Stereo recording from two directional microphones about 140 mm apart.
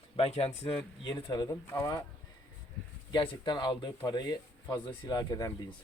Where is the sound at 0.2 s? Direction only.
45° left (ahead or behind).